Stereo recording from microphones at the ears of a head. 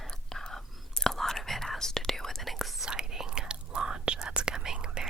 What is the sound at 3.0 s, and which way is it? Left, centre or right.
Whispering, right.